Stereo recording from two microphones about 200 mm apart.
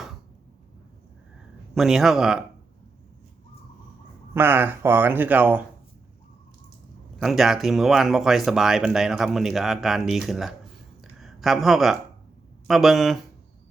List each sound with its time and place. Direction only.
1.7 s speech: centre (ahead or behind)
4.4 s speech: 10° right (ahead or behind)
7.2 s speech: centre (ahead or behind)
11.0 s a sound: centre (ahead or behind)
12.6 s speech: centre (ahead or behind)